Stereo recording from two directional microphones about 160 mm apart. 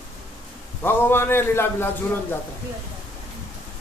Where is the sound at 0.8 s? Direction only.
15° left (ahead or behind).